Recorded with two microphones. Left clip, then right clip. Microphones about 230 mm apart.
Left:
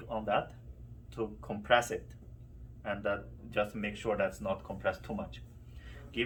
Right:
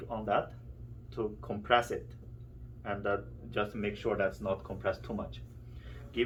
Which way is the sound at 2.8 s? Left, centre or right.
Left.